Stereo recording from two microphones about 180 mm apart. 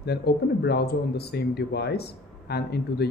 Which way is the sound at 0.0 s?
65° left (ahead or behind).